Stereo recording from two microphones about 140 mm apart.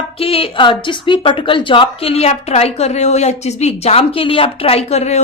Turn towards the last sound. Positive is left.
turn(degrees=50)  # may be behind; listen again after turning